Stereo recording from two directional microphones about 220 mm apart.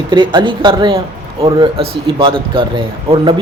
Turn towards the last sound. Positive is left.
turn(degrees=-25)  # may be behind; listen again after turning